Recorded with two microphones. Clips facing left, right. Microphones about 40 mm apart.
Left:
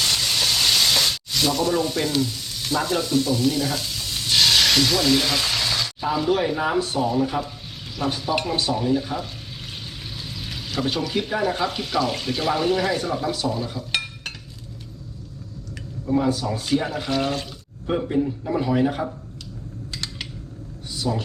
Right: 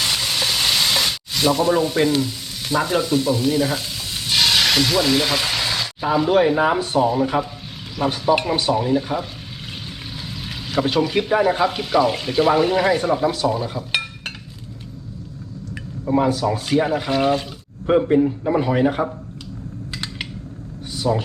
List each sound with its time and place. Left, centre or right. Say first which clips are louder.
0.0 s sizzle: right 1 dB; centre
7.9 s speech: right 6 dB; centre
10.4 s a sound: right 5 dB; centre
11.3 s speech: right 6 dB; right
13.7 s stir: right 3 dB; centre
16.0 s speech: right 4 dB; right
19.9 s dishes: right 3 dB; right
21.0 s speech: right 5 dB; right